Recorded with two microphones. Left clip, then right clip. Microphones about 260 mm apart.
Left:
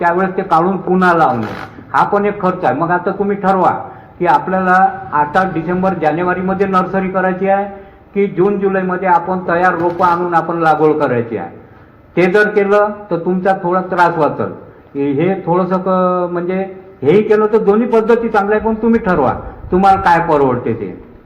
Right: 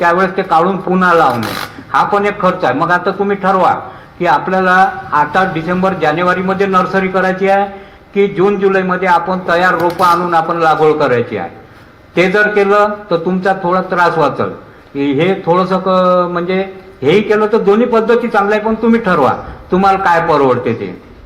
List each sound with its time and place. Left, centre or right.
0.0 s a man's voice: right